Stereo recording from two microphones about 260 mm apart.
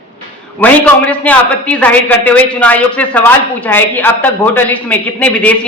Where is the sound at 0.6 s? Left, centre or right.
Centre.